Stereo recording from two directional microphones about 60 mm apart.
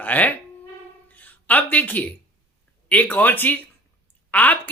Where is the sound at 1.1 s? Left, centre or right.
Left.